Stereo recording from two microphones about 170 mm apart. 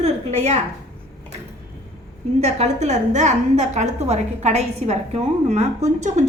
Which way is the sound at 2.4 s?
40° right (ahead or behind).